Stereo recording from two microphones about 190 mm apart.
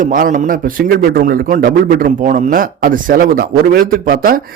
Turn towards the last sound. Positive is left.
turn(degrees=-50)  # may be behind; listen again after turning